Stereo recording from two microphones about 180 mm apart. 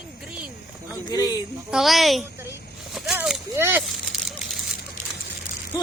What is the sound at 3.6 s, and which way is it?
Speech, 15° right (ahead or behind).